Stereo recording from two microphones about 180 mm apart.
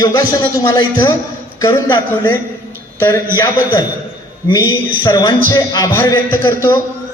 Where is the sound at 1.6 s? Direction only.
15° left (ahead or behind).